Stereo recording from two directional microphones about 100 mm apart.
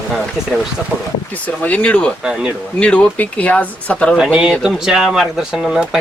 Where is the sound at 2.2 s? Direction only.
5° right (ahead or behind).